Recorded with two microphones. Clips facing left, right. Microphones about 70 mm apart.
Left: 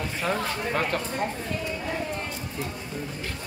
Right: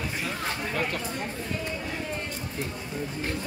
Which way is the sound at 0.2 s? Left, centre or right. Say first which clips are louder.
Left 8 dB; left.